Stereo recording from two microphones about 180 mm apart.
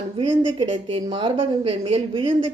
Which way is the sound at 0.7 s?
35° right (ahead or behind).